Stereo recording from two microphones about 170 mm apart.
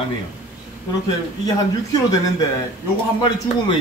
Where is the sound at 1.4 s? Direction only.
25° left (ahead or behind).